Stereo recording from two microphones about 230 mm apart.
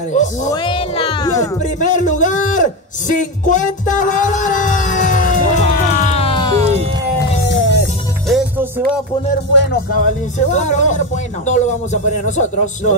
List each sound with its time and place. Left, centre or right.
0.1 s speech: left
0.5 s speech: centre
1.6 s speech: left
3.2 s music: left
7.4 s music: left
8.3 s music: centre
9.5 s speech: left
10.5 s speech: left